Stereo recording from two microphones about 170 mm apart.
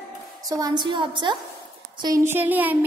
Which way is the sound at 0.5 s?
25° right (ahead or behind).